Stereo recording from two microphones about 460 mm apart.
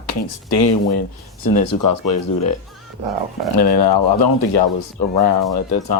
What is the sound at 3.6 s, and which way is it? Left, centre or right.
Speech, left.